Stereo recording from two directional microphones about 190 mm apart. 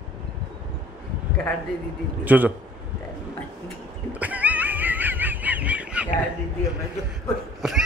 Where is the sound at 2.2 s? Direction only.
10° right (ahead or behind).